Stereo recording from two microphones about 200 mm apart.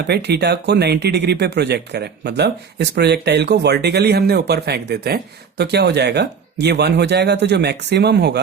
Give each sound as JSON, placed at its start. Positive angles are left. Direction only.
{"t": 0.1, "sound": "speech", "side_deg": -55}